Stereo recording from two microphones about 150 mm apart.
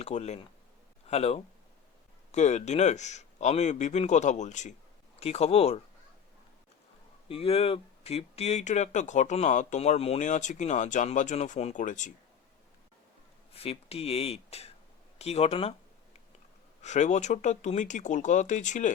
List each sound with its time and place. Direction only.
0.0 s speech: 50° left (ahead or behind)
7.3 s speech: 40° left (ahead or behind); by 12.1 s 55° left (ahead or behind)
13.5 s speech: 40° left (ahead or behind)
16.8 s speech: 50° left (ahead or behind)